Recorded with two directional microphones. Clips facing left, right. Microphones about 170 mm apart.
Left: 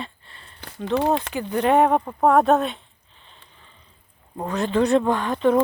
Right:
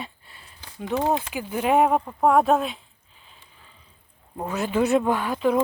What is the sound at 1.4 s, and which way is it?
Speech, 5° right (ahead or behind).